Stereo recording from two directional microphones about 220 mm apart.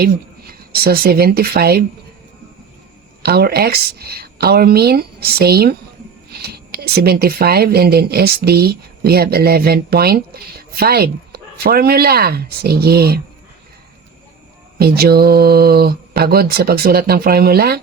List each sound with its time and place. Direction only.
0.0 s speech: 45° right (ahead or behind)
3.2 s speech: 45° right (ahead or behind)
14.8 s speech: 45° right (ahead or behind)